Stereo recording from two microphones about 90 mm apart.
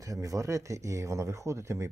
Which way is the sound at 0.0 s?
40° right (ahead or behind).